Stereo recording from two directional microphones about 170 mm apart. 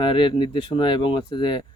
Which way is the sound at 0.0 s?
30° left (ahead or behind).